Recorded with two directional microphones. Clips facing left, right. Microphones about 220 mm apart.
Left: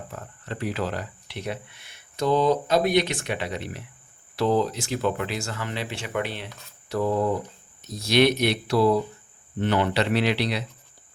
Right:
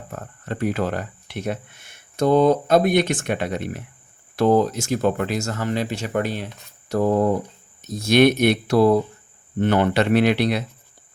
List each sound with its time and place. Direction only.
0.1 s speech: 50° right (ahead or behind)